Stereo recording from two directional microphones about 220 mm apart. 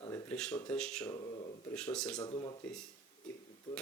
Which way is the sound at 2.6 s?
5° left (ahead or behind).